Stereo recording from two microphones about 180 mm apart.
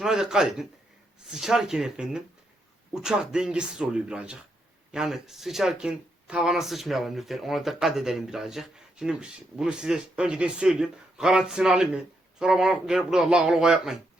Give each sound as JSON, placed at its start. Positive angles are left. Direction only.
{"t": 0.0, "sound": "speech", "side_deg": -5}